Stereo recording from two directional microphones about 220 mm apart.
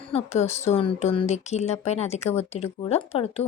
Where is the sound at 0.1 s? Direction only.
30° left (ahead or behind).